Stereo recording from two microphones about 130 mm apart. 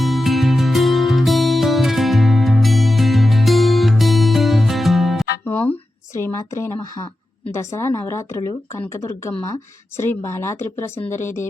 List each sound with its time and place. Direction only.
0.0 s music: centre (ahead or behind)
5.5 s a sound: 15° left (ahead or behind)
6.1 s speech: 20° left (ahead or behind)